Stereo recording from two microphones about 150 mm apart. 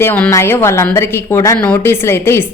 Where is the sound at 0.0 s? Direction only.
15° left (ahead or behind).